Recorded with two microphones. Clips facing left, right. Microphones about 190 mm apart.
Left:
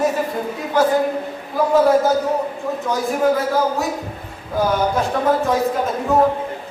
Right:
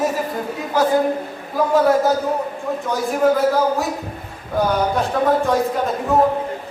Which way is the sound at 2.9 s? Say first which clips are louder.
Right 1 dB; centre (ahead or behind).